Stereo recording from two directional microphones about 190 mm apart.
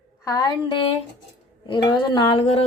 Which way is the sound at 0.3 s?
20° left (ahead or behind).